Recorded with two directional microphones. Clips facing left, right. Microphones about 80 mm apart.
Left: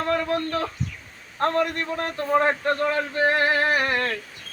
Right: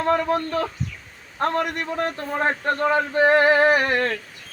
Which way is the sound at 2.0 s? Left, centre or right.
Right.